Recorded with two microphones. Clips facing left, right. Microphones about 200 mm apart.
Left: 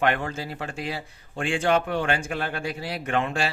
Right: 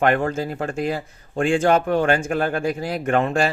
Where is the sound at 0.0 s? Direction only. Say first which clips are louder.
Right 6 dB; 45° right (ahead or behind).